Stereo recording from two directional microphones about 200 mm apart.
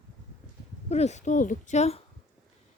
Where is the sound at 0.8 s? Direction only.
35° left (ahead or behind).